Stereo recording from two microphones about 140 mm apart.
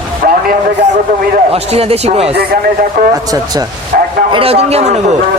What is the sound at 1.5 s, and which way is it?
Speech, 45° right (ahead or behind).